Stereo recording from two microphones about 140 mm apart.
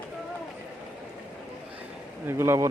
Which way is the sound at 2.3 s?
20° right (ahead or behind).